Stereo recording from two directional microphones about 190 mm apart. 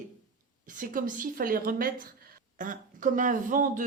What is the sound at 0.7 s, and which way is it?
Speech, 45° right (ahead or behind).